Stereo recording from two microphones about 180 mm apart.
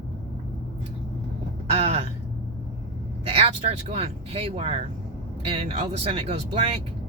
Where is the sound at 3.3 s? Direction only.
30° right (ahead or behind).